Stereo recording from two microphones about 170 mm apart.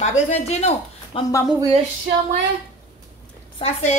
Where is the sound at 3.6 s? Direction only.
40° left (ahead or behind).